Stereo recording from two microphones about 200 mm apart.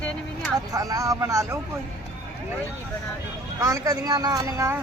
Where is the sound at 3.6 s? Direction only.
15° right (ahead or behind).